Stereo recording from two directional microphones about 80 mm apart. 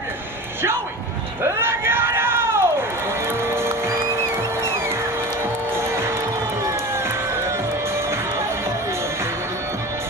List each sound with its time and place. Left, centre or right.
1.4 s speech: right
3.3 s music: right